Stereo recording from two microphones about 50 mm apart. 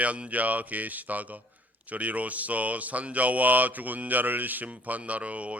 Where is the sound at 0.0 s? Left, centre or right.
Right.